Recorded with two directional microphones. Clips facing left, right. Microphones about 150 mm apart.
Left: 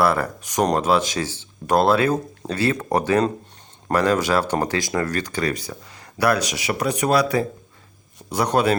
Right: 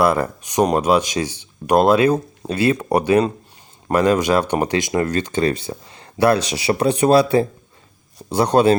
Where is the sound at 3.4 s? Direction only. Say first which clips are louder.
Right 1 dB; 5° right (ahead or behind).